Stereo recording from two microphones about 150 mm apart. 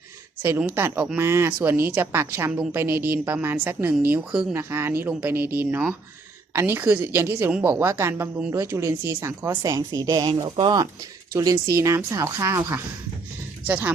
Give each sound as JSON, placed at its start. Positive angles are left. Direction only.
{"t": 0.4, "sound": "a woman's voice", "side_deg": -15}
{"t": 4.5, "sound": "a woman's voice", "side_deg": -15}